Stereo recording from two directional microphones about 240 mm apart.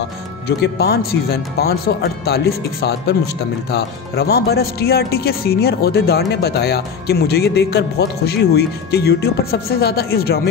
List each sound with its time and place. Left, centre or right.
0.5 s speech: left